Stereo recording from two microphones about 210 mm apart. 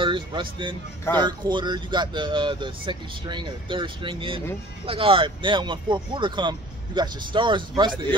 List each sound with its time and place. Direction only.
0.0 s speech: 25° right (ahead or behind)